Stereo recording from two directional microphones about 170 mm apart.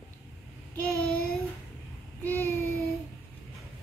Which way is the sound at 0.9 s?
5° left (ahead or behind).